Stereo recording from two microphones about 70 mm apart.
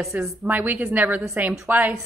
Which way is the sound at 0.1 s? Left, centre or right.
Right.